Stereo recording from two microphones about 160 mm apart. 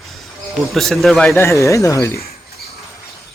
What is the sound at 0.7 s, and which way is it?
Speech, centre (ahead or behind).